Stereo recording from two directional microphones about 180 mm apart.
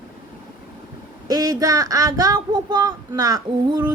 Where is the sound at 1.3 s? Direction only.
20° right (ahead or behind).